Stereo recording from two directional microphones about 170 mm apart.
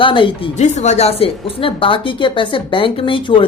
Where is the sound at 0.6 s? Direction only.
40° left (ahead or behind).